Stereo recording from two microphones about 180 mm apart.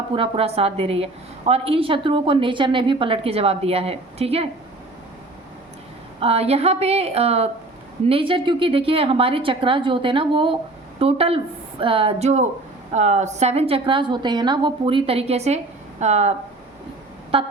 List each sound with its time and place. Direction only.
0.1 s a woman's voice: 30° right (ahead or behind)
6.1 s a woman's voice: 35° right (ahead or behind)
17.3 s a woman's voice: 30° right (ahead or behind)